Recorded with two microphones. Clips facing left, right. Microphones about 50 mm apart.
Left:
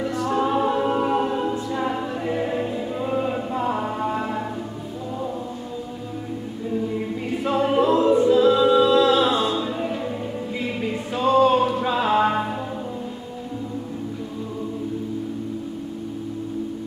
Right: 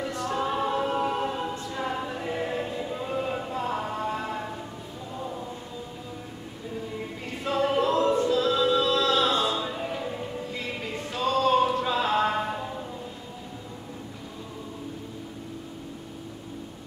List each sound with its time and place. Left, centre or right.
0.0 s a capella: centre
6.7 s a capella: centre